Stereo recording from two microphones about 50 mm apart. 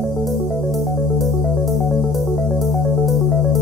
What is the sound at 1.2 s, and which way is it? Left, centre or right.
Music, centre.